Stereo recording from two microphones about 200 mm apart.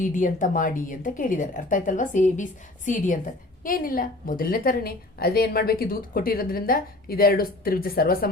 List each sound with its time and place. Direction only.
0.0 s a woman's voice: 40° left (ahead or behind)